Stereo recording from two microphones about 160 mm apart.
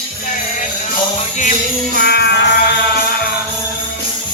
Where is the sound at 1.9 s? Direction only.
90° left.